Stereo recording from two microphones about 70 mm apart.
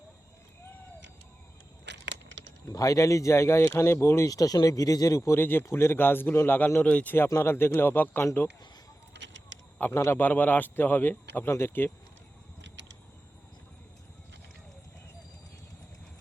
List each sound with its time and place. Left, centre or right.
2.6 s speech: left
4.3 s speech: left
5.4 s a man's voice: left
6.8 s speech: centre
7.4 s a man's voice: left
9.9 s a man's voice: left